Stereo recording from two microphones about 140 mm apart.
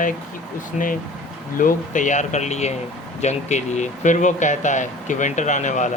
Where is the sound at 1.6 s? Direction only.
70° left (ahead or behind).